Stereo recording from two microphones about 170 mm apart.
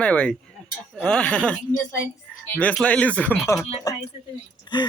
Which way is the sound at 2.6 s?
10° left (ahead or behind).